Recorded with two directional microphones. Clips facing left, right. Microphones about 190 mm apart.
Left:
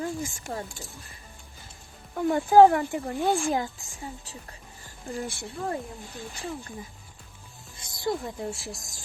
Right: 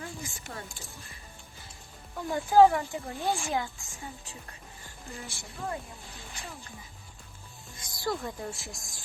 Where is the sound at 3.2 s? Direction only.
40° left (ahead or behind).